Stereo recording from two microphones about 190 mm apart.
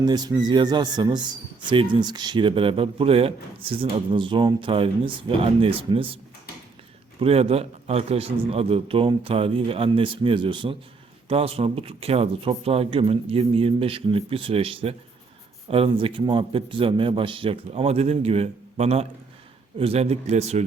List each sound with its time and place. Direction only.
0.0 s speech: 20° right (ahead or behind)
7.2 s speech: 30° right (ahead or behind)